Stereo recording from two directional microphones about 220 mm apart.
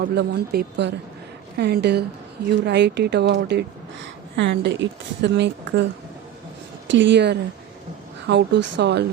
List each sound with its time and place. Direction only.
0.0 s speech: 50° right (ahead or behind)
6.8 s speech: 55° right (ahead or behind)